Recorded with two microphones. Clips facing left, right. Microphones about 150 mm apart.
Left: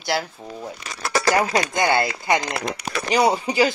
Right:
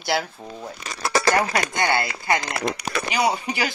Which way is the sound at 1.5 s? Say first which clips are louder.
Left 3 dB; 20° left (ahead or behind).